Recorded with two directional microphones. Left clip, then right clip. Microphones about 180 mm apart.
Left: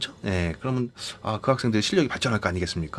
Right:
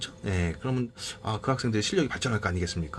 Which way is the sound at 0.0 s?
40° left (ahead or behind).